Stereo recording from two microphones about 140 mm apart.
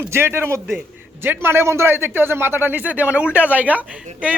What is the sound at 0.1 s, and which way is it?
Speech, 15° right (ahead or behind).